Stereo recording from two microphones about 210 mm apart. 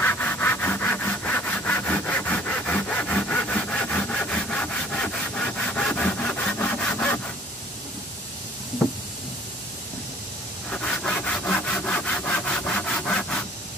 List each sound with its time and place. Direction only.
0.0 s wood: 10° left (ahead or behind)
10.7 s sawing: 5° left (ahead or behind)